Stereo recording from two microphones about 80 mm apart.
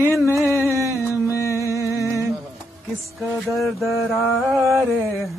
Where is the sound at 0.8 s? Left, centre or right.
Left.